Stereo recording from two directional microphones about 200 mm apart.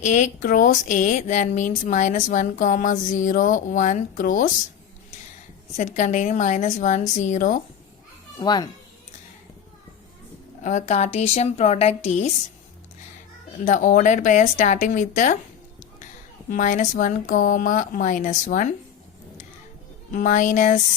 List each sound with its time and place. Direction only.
0.0 s speech: 35° left (ahead or behind)
5.7 s speech: 35° left (ahead or behind)
8.4 s a child's voice: 20° left (ahead or behind)
10.6 s speech: 35° left (ahead or behind)
13.7 s speech: 40° left (ahead or behind)
16.5 s speech: 40° left (ahead or behind)
20.1 s speech: 40° left (ahead or behind)